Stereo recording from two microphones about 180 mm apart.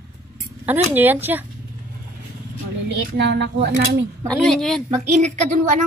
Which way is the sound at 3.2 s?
75° right (ahead or behind).